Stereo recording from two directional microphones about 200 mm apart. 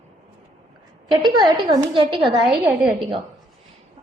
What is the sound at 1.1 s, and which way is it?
Speech, centre (ahead or behind).